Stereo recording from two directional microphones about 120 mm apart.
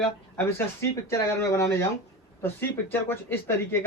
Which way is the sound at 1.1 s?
25° left (ahead or behind).